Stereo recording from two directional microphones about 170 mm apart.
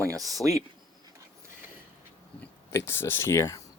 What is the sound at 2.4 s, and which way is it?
Speech, 15° left (ahead or behind).